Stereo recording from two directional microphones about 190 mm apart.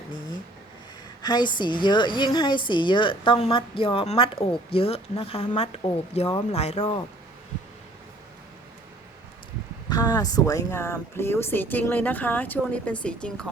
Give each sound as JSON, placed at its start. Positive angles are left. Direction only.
{"t": 1.2, "sound": "a woman's voice", "side_deg": 20}
{"t": 9.9, "sound": "speech", "side_deg": 20}